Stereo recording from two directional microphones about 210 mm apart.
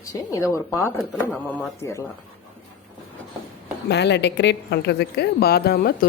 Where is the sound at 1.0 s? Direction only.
Centre (ahead or behind).